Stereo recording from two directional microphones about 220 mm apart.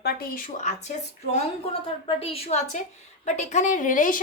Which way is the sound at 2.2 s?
25° left (ahead or behind).